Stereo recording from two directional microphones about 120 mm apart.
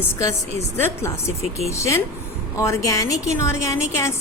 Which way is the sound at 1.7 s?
25° left (ahead or behind).